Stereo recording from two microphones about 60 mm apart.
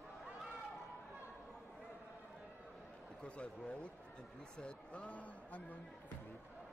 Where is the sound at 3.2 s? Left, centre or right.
Centre.